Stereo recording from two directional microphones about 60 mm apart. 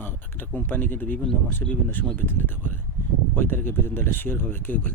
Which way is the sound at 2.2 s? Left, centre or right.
Left.